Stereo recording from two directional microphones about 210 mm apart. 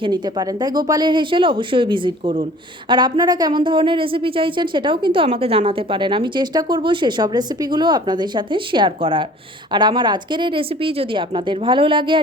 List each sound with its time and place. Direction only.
0.0 s a woman's voice: 20° right (ahead or behind)